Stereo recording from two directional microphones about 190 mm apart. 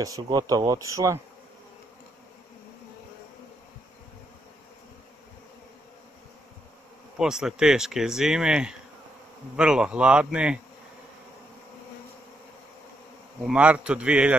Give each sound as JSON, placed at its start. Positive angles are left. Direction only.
{"t": 0.0, "sound": "speech", "side_deg": -20}
{"t": 7.2, "sound": "speech", "side_deg": -5}
{"t": 13.5, "sound": "a man's voice", "side_deg": -5}